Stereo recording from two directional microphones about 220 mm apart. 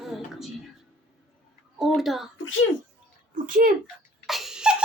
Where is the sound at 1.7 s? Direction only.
Centre (ahead or behind).